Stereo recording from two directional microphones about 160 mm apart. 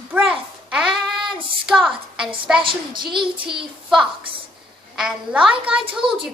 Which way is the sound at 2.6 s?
30° right (ahead or behind).